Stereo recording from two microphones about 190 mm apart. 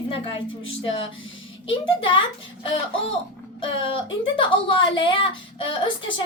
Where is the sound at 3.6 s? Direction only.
25° left (ahead or behind).